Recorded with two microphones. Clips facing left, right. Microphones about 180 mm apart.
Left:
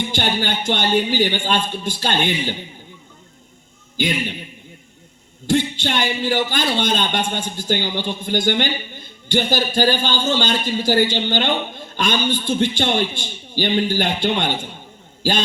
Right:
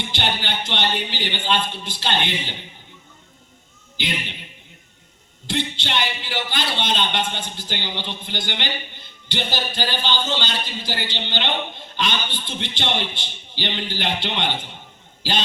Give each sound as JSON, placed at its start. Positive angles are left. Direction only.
{"t": 0.1, "sound": "a man's voice", "side_deg": 45}
{"t": 3.9, "sound": "a man's voice", "side_deg": 45}
{"t": 5.5, "sound": "a man's voice", "side_deg": 45}